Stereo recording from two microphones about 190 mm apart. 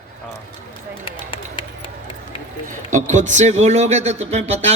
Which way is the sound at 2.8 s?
40° right (ahead or behind).